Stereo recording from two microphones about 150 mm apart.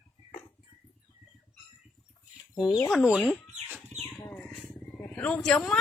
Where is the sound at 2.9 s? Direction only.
Centre (ahead or behind).